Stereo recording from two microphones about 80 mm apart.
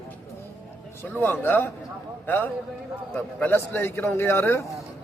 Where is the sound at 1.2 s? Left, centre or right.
Left.